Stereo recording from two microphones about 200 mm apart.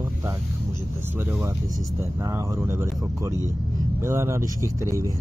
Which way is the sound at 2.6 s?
15° right (ahead or behind).